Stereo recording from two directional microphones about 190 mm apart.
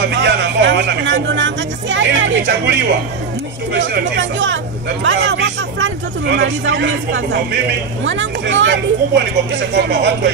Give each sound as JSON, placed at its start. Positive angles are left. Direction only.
{"t": 0.0, "sound": "speech", "side_deg": -65}